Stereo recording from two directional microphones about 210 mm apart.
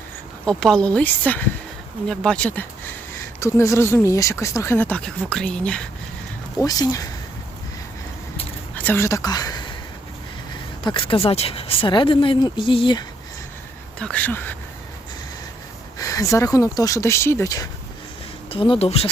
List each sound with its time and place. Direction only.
0.4 s a woman's voice: 5° left (ahead or behind)
6.6 s speech: 15° left (ahead or behind)
8.7 s speech: 10° left (ahead or behind)
10.8 s speech: 25° left (ahead or behind)
14.0 s speech: 5° left (ahead or behind)
16.0 s speech: 15° left (ahead or behind)